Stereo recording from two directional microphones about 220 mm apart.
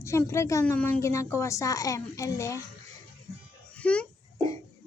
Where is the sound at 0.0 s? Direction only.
10° left (ahead or behind).